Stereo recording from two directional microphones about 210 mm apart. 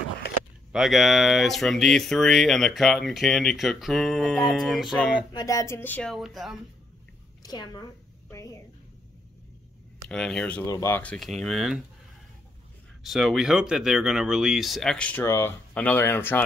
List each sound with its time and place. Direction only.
0.7 s speech: centre (ahead or behind)
5.3 s speech: 15° left (ahead or behind); by 6.5 s centre (ahead or behind)
7.4 s speech: 20° left (ahead or behind)
10.0 s speech: 5° left (ahead or behind)
13.0 s speech: centre (ahead or behind)